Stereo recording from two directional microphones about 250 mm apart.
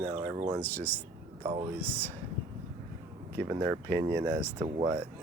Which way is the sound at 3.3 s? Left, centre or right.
Centre.